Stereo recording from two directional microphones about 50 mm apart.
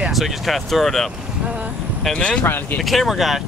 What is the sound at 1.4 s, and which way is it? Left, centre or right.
Vehicle, right.